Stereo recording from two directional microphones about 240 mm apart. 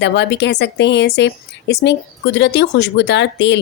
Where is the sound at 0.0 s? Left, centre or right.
Left.